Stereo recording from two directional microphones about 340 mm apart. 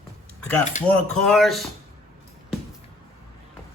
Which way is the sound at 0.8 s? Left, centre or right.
Left.